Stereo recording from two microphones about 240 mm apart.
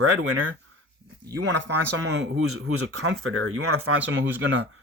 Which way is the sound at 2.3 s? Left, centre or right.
Right.